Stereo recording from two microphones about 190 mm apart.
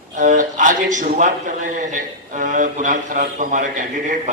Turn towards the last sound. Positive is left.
turn(degrees=-45)  # may be behind; listen again after turning